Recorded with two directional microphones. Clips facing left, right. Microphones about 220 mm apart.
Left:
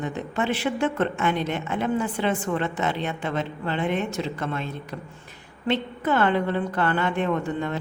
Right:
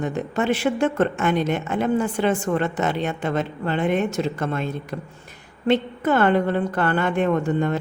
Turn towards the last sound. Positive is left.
turn(degrees=-45)  # may be behind; listen again after turning